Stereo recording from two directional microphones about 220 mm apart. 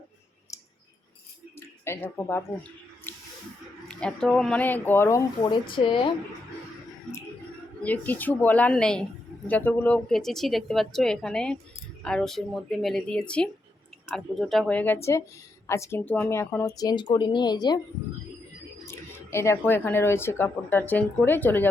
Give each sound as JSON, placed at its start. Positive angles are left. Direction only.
{"t": 0.5, "sound": "a sound", "side_deg": 15}
{"t": 3.1, "sound": "spray", "side_deg": 10}
{"t": 3.8, "sound": "speech", "side_deg": 5}
{"t": 7.8, "sound": "speech", "side_deg": 5}
{"t": 18.9, "sound": "speech", "side_deg": 10}